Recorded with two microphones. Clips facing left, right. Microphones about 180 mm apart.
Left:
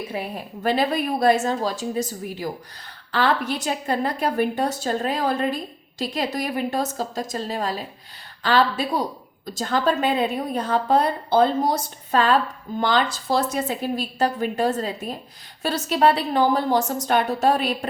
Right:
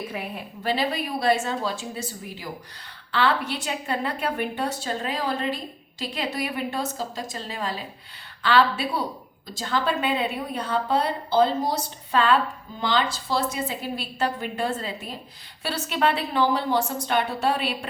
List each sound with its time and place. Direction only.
0.1 s a woman's voice: 35° left (ahead or behind)
0.6 s a woman's voice: 50° left (ahead or behind)